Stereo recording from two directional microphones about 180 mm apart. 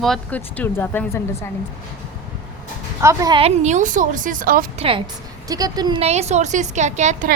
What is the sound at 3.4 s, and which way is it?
A woman's voice, 40° right (ahead or behind).